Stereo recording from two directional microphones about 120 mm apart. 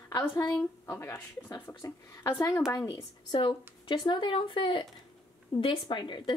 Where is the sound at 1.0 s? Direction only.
30° left (ahead or behind).